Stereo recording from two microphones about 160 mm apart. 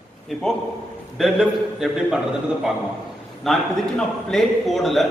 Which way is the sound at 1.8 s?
5° right (ahead or behind).